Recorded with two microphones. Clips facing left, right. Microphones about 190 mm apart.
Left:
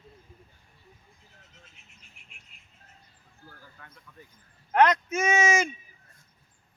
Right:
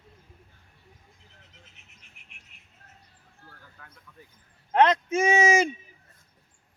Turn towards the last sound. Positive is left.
turn(degrees=-35)  # may be behind; listen again after turning